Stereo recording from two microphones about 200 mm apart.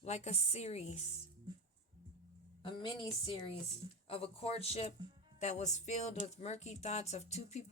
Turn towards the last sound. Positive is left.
turn(degrees=35)  # may be behind; listen again after turning